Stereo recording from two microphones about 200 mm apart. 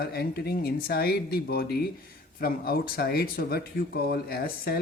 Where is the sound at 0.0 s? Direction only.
50° left (ahead or behind).